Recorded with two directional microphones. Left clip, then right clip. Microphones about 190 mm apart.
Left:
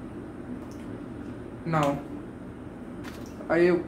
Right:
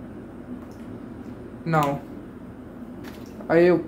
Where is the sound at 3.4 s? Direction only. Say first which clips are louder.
Right 5 dB; 50° right (ahead or behind).